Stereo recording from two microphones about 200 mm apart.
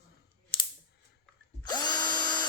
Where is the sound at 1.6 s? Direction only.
20° left (ahead or behind).